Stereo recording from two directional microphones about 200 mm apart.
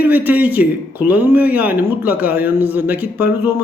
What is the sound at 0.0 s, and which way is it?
Speech, 10° right (ahead or behind).